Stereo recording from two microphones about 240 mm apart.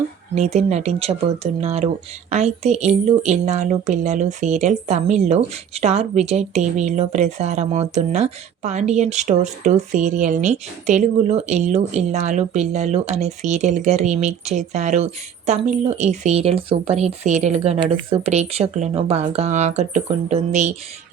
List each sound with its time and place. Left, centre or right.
0.3 s a woman's voice: right